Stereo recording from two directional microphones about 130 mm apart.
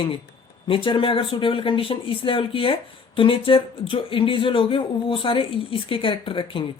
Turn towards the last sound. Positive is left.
turn(degrees=40)  # may be behind; listen again after turning